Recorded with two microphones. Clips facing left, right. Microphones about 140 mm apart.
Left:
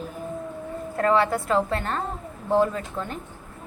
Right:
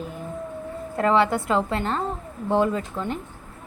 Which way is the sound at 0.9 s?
20° right (ahead or behind).